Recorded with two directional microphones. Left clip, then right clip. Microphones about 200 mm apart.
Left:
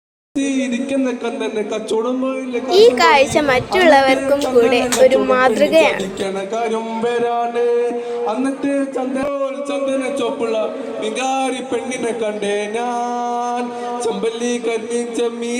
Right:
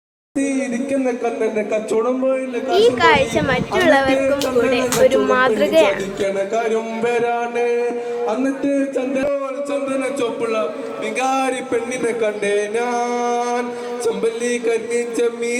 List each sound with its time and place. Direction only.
1.0 s a woman's voice: 15° left (ahead or behind)
5.0 s a woman's voice: 5° left (ahead or behind)
11.2 s a sound: centre (ahead or behind)